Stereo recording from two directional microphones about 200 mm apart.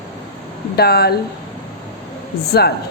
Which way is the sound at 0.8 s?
50° left (ahead or behind).